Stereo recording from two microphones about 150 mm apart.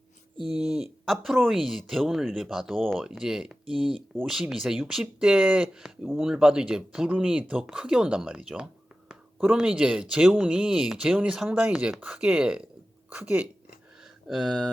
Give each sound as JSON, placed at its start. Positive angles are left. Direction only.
{"t": 0.3, "sound": "speech", "side_deg": 25}
{"t": 0.6, "sound": "speech", "side_deg": 0}
{"t": 13.1, "sound": "a sound", "side_deg": -10}